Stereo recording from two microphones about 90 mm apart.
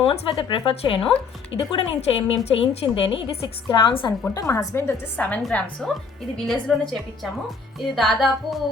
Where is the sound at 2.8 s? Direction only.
70° left (ahead or behind).